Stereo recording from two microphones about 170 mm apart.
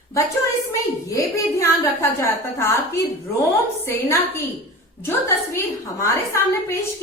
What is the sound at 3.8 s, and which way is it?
A woman's voice, 15° left (ahead or behind).